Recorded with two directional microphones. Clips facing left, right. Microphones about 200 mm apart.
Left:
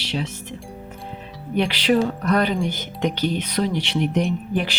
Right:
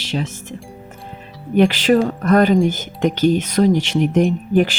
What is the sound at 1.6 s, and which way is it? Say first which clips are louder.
Speech: right 5 dB; 45° right (ahead or behind).